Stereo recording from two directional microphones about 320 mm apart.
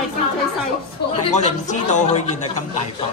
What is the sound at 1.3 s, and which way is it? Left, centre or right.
Speech, left.